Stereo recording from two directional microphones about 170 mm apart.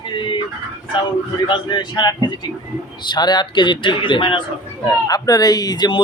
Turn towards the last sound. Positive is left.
turn(degrees=25)  # may be behind; listen again after turning